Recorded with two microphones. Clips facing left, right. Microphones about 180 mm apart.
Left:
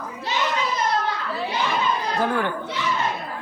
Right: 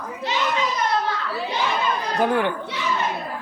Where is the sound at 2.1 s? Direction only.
15° right (ahead or behind).